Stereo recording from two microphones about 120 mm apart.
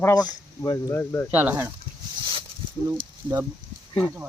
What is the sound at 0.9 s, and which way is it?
Speech, 20° left (ahead or behind).